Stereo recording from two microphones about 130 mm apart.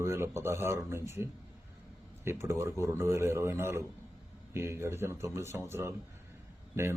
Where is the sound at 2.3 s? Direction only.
20° right (ahead or behind).